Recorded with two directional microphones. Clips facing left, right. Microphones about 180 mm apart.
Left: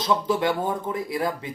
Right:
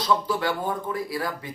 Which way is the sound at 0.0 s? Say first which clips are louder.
Left 2 dB; 20° left (ahead or behind).